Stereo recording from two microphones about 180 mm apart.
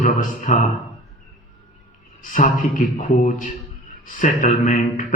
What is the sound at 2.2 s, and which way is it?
Speech, 50° left (ahead or behind).